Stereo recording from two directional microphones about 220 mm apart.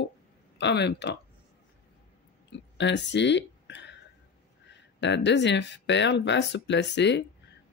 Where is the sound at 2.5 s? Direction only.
55° left (ahead or behind).